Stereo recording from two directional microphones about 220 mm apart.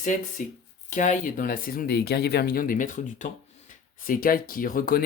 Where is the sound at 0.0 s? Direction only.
35° left (ahead or behind).